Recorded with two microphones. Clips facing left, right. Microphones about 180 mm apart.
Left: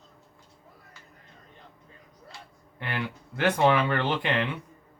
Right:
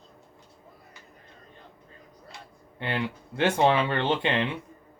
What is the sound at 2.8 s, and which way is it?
Speech, 25° right (ahead or behind).